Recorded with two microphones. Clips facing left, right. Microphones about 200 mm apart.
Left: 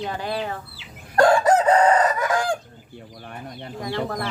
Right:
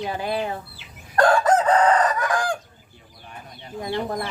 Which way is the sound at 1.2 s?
25° left (ahead or behind).